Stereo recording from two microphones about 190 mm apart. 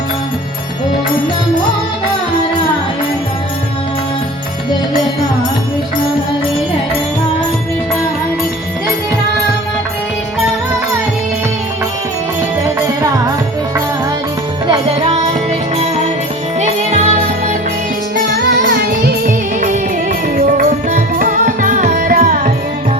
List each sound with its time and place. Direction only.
14.7 s music: 30° right (ahead or behind)
16.6 s jingle bell: 40° right (ahead or behind)
18.3 s music: 55° right (ahead or behind)